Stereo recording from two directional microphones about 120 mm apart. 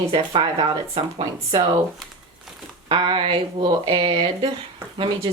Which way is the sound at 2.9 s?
45° right (ahead or behind).